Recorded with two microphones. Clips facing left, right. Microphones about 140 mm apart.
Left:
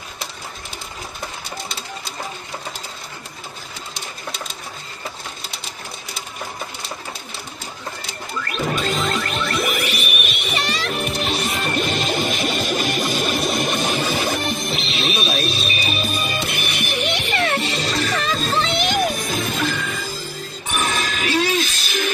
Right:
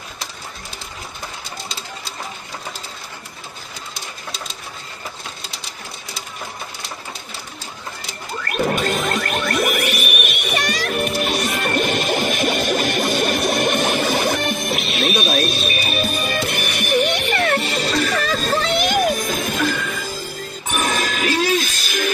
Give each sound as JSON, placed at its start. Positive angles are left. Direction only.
{"t": 8.5, "sound": "music", "side_deg": -50}